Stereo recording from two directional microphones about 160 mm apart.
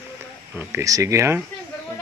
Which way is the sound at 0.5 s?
15° right (ahead or behind).